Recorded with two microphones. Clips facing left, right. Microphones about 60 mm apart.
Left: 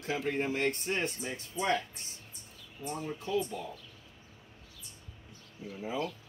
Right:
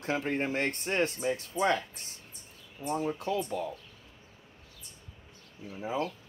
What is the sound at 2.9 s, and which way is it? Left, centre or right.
Speech, right.